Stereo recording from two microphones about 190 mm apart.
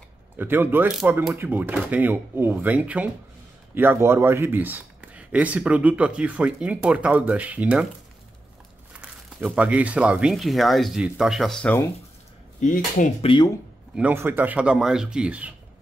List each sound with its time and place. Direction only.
0.4 s speech: 10° right (ahead or behind)
9.0 s speech: 5° right (ahead or behind)
12.5 s speech: 40° left (ahead or behind)
13.9 s speech: 10° right (ahead or behind)